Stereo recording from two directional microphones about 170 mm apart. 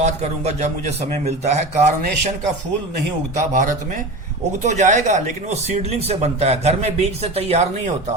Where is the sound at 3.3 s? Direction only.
50° right (ahead or behind).